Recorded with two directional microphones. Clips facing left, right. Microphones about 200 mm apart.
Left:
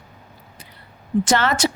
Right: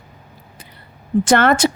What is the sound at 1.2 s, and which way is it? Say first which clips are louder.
Speech: right 6 dB; 55° right (ahead or behind).